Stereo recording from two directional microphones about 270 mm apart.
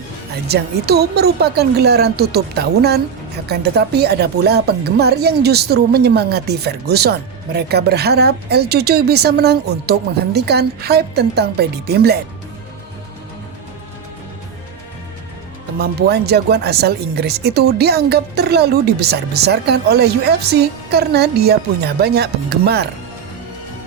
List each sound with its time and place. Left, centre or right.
0.4 s speech: right
15.8 s speech: right